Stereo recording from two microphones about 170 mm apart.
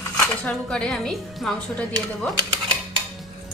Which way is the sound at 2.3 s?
30° right (ahead or behind).